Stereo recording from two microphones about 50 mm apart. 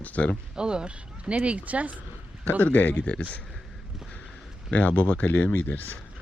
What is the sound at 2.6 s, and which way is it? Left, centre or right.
Speech, left.